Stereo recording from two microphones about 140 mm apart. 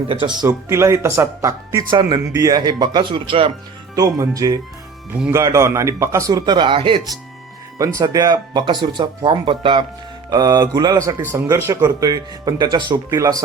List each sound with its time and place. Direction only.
0.1 s speech: 35° right (ahead or behind)
0.7 s speech: 20° right (ahead or behind); by 3.5 s 35° right (ahead or behind)
3.9 s speech: 25° right (ahead or behind)
7.9 s speech: 25° right (ahead or behind)